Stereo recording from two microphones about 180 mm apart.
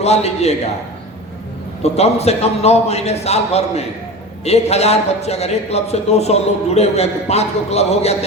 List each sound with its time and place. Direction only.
0.0 s a man's voice: 35° left (ahead or behind)
1.8 s a man's voice: 35° left (ahead or behind)